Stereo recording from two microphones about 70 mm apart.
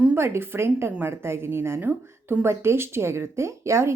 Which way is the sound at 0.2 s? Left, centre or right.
Right.